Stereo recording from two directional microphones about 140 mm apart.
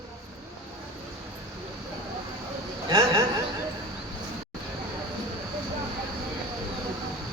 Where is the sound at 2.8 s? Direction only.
25° right (ahead or behind).